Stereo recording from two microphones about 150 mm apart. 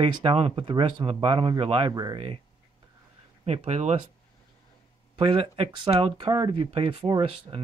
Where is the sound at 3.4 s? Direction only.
45° right (ahead or behind).